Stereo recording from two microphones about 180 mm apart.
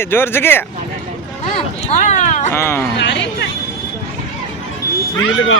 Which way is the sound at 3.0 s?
80° left.